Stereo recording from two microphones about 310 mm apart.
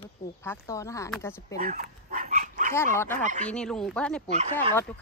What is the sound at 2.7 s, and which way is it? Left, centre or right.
Speech, centre.